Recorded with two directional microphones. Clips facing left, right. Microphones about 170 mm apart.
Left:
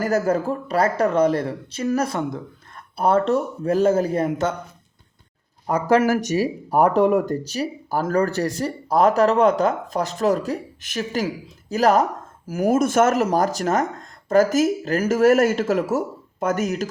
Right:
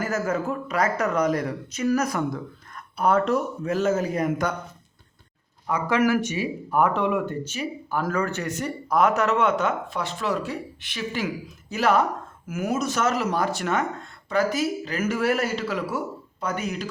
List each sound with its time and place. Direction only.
0.0 s speech: 35° left (ahead or behind)
5.6 s speech: 40° left (ahead or behind)